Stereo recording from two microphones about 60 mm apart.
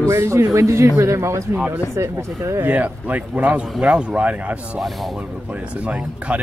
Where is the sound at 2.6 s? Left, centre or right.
Right.